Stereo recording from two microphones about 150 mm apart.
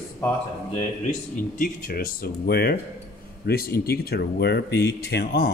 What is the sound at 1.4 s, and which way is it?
Speech, 65° left (ahead or behind).